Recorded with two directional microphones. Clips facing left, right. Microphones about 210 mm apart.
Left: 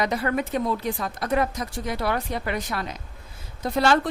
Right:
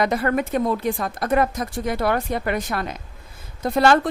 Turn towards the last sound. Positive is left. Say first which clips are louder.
# right 4 dB
turn(degrees=-50)  # may be behind; listen again after turning